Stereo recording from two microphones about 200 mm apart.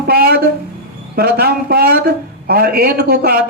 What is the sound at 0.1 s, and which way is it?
A man's voice, 50° right (ahead or behind).